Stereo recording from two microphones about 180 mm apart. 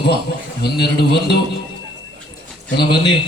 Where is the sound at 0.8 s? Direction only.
65° left (ahead or behind).